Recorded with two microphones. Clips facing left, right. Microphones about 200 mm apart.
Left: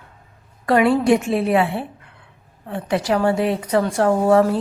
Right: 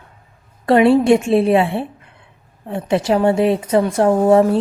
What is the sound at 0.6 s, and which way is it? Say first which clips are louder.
Speech: right 4 dB; 25° right (ahead or behind).